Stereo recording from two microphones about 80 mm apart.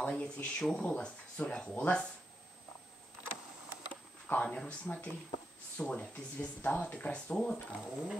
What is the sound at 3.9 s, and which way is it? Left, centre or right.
Speech, centre.